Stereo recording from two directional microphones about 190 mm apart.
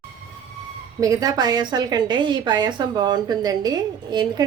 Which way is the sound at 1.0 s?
20° right (ahead or behind).